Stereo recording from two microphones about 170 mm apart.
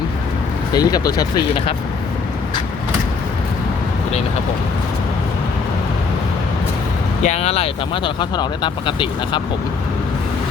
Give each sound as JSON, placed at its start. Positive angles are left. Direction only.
{"t": 0.7, "sound": "speech", "side_deg": 25}
{"t": 7.2, "sound": "speech", "side_deg": 40}